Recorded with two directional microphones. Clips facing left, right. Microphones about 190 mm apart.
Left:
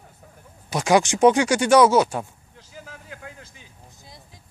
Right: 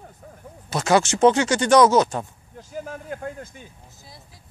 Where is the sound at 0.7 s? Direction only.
15° left (ahead or behind).